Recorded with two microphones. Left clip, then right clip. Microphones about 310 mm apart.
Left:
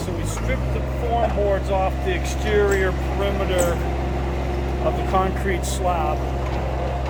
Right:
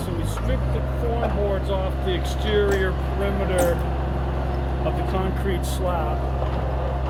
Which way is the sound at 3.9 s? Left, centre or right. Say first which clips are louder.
Left 2 dB; left.